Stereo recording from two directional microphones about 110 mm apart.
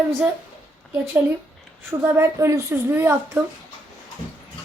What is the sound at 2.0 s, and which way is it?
Speech, 20° right (ahead or behind).